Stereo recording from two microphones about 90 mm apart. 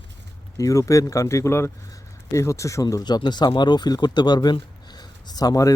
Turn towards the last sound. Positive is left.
turn(degrees=40)  # may be behind; listen again after turning